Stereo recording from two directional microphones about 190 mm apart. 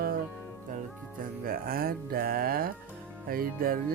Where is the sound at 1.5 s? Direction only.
50° right (ahead or behind).